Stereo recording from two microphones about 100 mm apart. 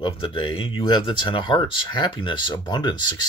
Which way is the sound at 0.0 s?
55° left (ahead or behind).